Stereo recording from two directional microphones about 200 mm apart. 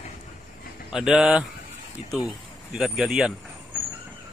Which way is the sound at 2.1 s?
20° left (ahead or behind).